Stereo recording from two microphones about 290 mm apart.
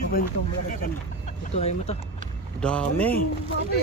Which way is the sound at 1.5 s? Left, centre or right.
Left.